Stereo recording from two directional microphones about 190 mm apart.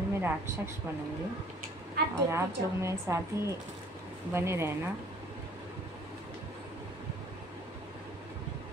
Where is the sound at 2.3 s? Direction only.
15° right (ahead or behind).